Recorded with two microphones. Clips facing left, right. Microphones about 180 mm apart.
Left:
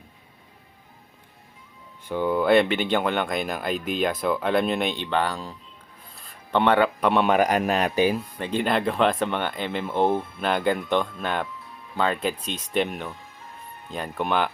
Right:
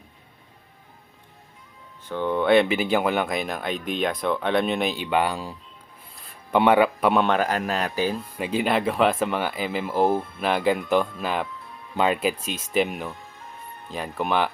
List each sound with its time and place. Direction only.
2.0 s speech: 10° left (ahead or behind)
7.3 s speech: 15° left (ahead or behind)
8.4 s speech: 5° right (ahead or behind)